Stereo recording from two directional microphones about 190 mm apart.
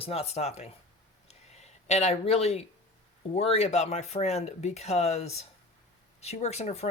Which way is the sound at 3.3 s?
30° left (ahead or behind).